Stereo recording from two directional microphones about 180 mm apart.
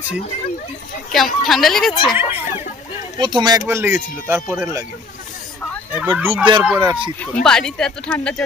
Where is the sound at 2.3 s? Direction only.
35° left (ahead or behind).